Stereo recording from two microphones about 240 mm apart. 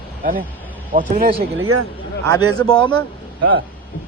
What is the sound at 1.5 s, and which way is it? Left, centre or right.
Speech, right.